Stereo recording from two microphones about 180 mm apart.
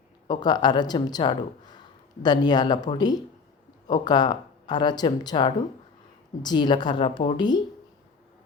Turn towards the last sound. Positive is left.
turn(degrees=25)  # may be behind; listen again after turning